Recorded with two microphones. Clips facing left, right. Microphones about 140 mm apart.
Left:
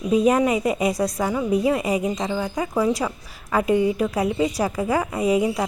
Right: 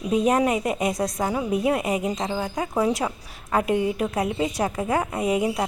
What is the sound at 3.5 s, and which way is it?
A woman's voice, centre (ahead or behind).